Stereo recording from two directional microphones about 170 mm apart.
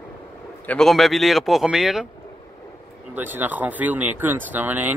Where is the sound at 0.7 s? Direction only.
Centre (ahead or behind).